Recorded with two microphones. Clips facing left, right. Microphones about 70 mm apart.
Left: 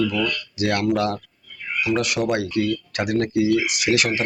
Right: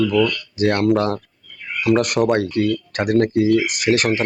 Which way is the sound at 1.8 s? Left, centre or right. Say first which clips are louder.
Right 6 dB; right.